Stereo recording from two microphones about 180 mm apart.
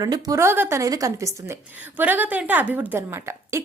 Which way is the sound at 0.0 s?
20° right (ahead or behind).